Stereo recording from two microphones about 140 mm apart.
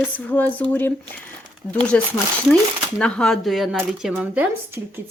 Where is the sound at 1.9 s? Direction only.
5° left (ahead or behind).